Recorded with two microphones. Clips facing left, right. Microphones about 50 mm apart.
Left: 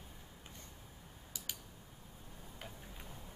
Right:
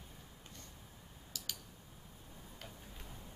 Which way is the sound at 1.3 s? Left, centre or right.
Centre.